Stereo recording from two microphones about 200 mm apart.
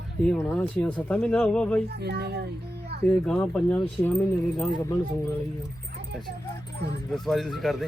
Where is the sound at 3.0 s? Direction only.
5° left (ahead or behind).